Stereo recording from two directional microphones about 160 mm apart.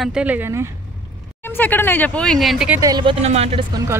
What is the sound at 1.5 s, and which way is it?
Speech, 10° left (ahead or behind).